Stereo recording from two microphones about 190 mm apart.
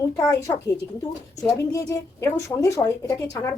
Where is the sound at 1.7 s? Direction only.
15° left (ahead or behind).